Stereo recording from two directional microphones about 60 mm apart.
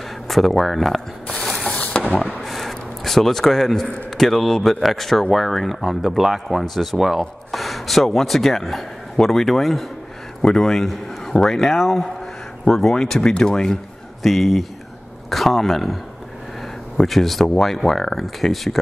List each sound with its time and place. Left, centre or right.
0.3 s speech: centre
1.4 s ratchet: centre
2.2 s a sound: centre
4.2 s speech: centre
14.2 s speech: centre